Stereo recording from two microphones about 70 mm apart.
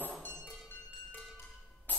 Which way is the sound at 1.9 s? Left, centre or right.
Left.